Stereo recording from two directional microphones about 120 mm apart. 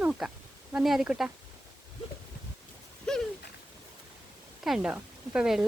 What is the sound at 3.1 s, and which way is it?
Speech, 5° left (ahead or behind).